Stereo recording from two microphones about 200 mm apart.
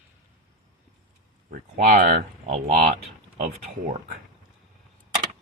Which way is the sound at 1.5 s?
45° right (ahead or behind).